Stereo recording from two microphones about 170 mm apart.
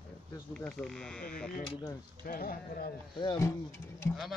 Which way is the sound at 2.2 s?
60° left (ahead or behind).